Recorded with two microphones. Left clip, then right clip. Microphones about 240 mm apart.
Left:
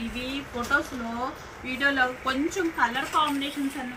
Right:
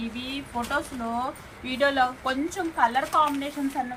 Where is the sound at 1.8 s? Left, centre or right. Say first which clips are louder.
Right 1 dB; centre.